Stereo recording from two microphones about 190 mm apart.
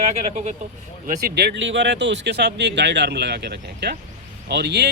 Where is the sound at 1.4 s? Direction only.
70° right (ahead or behind).